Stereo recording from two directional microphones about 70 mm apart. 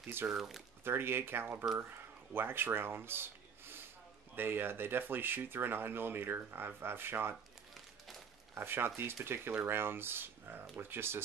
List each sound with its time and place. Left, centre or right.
0.3 s speech: centre
0.8 s speech: right
8.5 s speech: right